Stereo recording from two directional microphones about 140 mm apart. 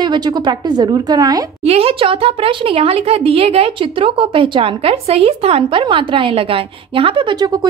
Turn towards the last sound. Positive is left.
turn(degrees=-35)  # may be behind; listen again after turning